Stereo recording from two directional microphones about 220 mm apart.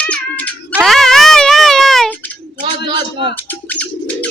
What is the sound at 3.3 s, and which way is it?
Speech, 10° left (ahead or behind).